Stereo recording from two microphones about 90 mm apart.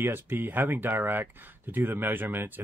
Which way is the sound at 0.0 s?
25° right (ahead or behind).